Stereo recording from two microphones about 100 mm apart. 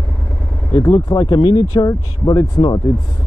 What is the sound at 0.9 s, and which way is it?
Speech, 40° left (ahead or behind).